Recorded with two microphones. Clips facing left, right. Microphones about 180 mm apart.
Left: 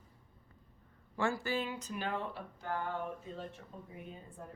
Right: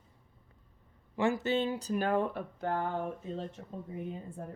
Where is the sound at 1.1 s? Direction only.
20° right (ahead or behind); by 3.1 s 50° right (ahead or behind).